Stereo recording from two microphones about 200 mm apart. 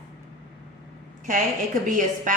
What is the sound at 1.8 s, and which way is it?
Speech, 40° right (ahead or behind).